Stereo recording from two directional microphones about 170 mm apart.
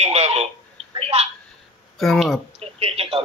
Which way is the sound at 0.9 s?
35° right (ahead or behind).